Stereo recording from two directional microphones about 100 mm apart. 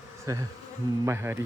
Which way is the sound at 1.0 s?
25° right (ahead or behind).